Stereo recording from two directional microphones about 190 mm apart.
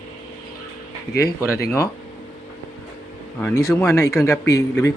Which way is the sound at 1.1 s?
55° left (ahead or behind).